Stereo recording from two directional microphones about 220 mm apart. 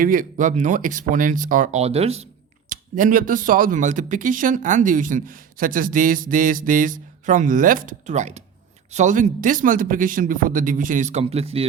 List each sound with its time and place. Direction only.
0.0 s speech: 40° right (ahead or behind)